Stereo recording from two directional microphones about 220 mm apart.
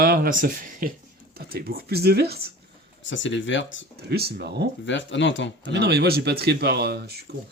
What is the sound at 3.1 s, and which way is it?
Speech, 55° left (ahead or behind).